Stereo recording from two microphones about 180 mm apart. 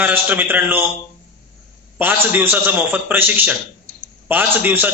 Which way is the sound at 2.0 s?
10° right (ahead or behind).